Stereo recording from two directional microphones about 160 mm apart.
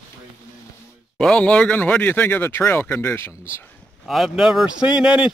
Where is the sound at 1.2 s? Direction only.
5° left (ahead or behind).